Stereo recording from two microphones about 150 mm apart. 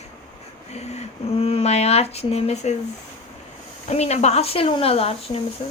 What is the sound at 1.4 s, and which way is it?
A woman's voice, 40° left (ahead or behind).